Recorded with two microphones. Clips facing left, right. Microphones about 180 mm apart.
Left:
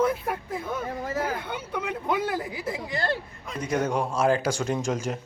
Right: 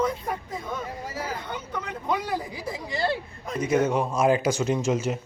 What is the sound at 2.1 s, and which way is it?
Speech, centre (ahead or behind).